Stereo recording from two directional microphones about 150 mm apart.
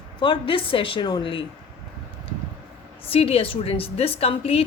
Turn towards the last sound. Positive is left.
turn(degrees=40)  # may be behind; listen again after turning